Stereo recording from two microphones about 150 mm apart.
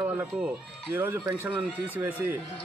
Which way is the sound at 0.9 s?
15° right (ahead or behind).